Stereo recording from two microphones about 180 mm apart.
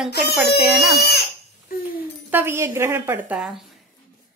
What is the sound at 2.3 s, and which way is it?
A woman's voice, 15° right (ahead or behind).